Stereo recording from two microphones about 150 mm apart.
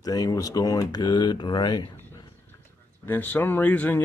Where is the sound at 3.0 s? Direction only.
10° left (ahead or behind).